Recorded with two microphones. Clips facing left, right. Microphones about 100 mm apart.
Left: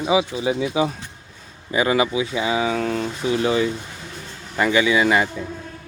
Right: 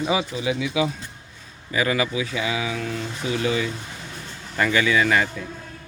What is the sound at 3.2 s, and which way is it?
Speech, 30° left (ahead or behind).